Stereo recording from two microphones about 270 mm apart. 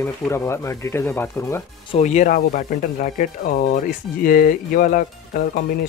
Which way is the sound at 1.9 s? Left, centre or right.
Left.